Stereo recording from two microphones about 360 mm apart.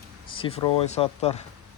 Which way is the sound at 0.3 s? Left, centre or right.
Centre.